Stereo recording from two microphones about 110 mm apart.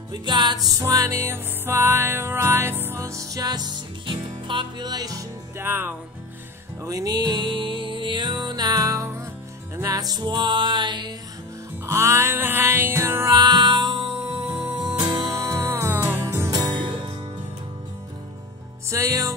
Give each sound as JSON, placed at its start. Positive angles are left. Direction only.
{"t": 0.1, "sound": "music", "side_deg": -45}
{"t": 5.6, "sound": "music", "side_deg": -20}
{"t": 6.8, "sound": "music", "side_deg": -30}
{"t": 11.8, "sound": "music", "side_deg": -25}
{"t": 13.4, "sound": "music", "side_deg": -40}
{"t": 16.4, "sound": "music", "side_deg": -35}
{"t": 18.9, "sound": "music", "side_deg": -30}